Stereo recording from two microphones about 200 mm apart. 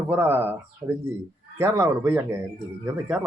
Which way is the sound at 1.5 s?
10° right (ahead or behind).